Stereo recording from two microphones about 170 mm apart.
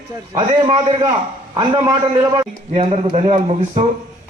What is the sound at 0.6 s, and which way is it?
Speech, 30° right (ahead or behind).